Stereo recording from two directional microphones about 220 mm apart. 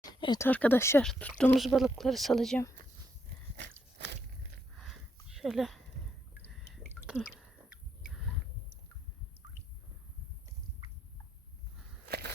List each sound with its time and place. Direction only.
0.0 s speech: 20° left (ahead or behind); by 2.6 s centre (ahead or behind)
3.6 s walk: 50° right (ahead or behind)
4.8 s a sound: centre (ahead or behind)
12.0 s walk: 45° right (ahead or behind)